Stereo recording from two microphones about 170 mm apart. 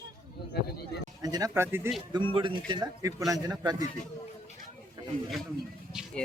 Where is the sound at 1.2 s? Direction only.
20° right (ahead or behind).